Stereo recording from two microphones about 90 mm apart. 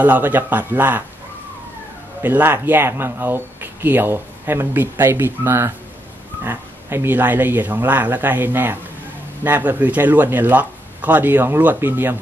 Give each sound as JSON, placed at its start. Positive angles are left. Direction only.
{"t": 0.0, "sound": "speech", "side_deg": -20}
{"t": 2.2, "sound": "speech", "side_deg": -25}